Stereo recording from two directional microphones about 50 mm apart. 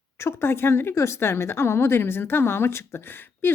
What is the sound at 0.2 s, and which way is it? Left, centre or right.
Speech, left.